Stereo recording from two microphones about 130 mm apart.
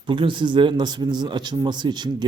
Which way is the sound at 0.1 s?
40° right (ahead or behind).